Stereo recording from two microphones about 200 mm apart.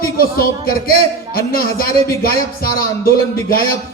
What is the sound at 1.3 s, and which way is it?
A man's voice, 50° left (ahead or behind).